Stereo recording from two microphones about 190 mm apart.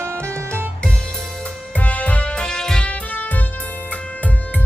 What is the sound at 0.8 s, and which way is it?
Music, 5° left (ahead or behind).